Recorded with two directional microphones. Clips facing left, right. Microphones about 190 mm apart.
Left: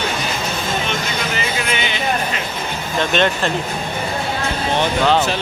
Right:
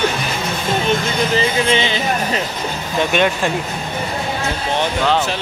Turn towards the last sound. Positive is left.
turn(degrees=-10)  # may be behind; listen again after turning